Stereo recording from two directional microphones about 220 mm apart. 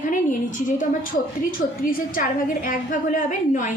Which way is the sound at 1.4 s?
40° left (ahead or behind).